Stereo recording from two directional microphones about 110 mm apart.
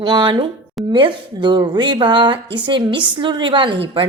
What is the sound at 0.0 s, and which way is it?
A woman's voice, 40° right (ahead or behind).